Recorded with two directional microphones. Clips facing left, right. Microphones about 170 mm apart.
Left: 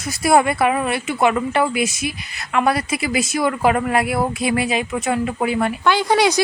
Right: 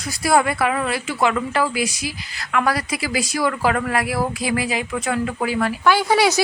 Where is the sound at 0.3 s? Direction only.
25° left (ahead or behind).